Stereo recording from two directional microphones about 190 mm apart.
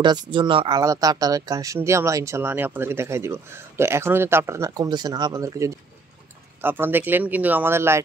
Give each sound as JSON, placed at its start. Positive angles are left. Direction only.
{"t": 0.0, "sound": "speech", "side_deg": -25}